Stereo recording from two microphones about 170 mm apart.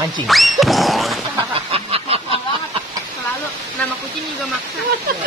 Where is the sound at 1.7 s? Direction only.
35° right (ahead or behind).